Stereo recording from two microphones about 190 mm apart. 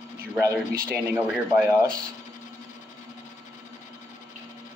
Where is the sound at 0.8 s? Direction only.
10° right (ahead or behind).